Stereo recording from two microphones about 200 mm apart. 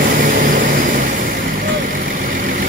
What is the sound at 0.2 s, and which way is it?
Vehicle, 45° right (ahead or behind).